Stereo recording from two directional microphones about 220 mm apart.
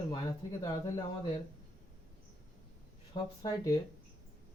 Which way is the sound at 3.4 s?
15° left (ahead or behind).